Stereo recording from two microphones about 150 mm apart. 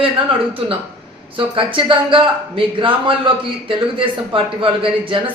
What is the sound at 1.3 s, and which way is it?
Speech, 35° right (ahead or behind).